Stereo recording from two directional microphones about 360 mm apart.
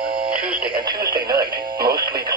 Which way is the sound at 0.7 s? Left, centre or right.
Centre.